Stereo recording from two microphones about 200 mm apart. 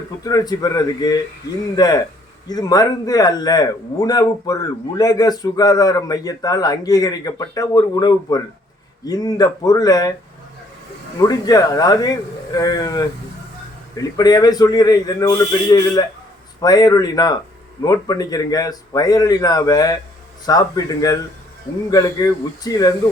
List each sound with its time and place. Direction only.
0.2 s a man's voice: 20° left (ahead or behind)
11.2 s a man's voice: 20° left (ahead or behind)